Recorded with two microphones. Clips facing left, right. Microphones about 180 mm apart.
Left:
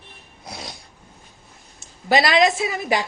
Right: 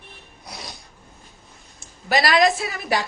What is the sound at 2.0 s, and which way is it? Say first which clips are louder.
A woman's voice: left 1 dB; 25° left (ahead or behind).